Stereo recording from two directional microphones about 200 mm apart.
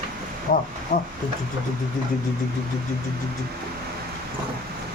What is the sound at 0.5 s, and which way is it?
Speech, 45° left (ahead or behind).